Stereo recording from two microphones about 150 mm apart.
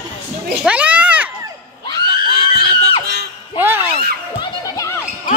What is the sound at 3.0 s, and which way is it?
Screaming, 90° right.